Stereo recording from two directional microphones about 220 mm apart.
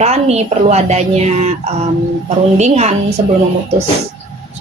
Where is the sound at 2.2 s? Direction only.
30° right (ahead or behind).